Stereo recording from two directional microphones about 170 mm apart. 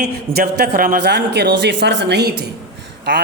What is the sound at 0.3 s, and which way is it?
Speech, 65° right (ahead or behind).